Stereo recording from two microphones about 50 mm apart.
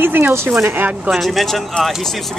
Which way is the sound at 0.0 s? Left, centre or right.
Right.